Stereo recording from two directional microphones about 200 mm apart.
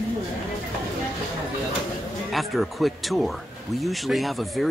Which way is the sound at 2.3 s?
Centre (ahead or behind).